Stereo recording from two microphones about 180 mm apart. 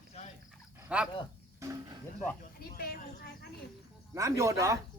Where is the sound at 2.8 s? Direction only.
60° left (ahead or behind).